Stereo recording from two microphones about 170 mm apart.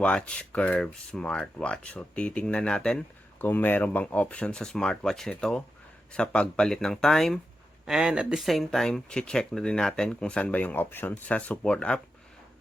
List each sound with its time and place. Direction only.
0.0 s speech: 5° left (ahead or behind)